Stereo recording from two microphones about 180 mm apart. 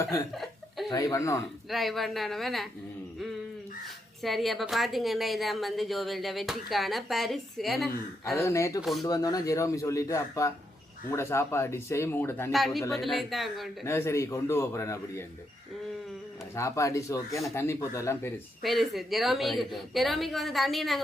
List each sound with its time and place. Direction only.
0.0 s speech: 15° left (ahead or behind)
1.7 s a woman's voice: centre (ahead or behind)
4.2 s a woman's voice: centre (ahead or behind)
8.4 s speech: 15° left (ahead or behind)
12.5 s a woman's voice: centre (ahead or behind)
13.8 s speech: 15° left (ahead or behind)
16.6 s speech: 15° left (ahead or behind)
18.6 s a woman's voice: centre (ahead or behind)